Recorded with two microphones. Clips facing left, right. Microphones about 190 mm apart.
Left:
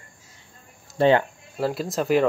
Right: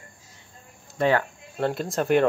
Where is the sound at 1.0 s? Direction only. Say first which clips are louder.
Left 4 dB; 30° left (ahead or behind).